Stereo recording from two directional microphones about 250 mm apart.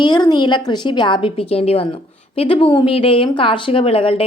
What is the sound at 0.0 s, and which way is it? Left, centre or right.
A woman's voice, centre.